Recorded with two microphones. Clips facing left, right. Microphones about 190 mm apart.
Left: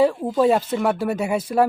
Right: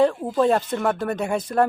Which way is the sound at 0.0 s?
5° left (ahead or behind).